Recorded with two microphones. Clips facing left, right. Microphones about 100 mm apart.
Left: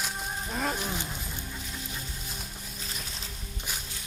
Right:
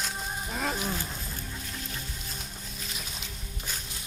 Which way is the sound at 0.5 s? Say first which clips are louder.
Even; centre (ahead or behind).